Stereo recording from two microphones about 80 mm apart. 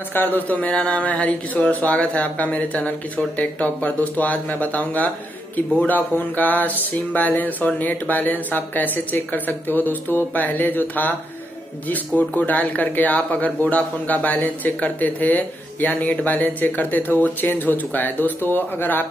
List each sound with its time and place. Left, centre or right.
0.1 s speech: left